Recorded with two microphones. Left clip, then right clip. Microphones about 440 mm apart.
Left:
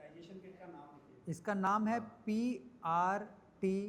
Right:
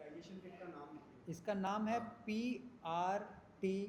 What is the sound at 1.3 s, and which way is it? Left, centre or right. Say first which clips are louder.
Speech: left 6 dB; left.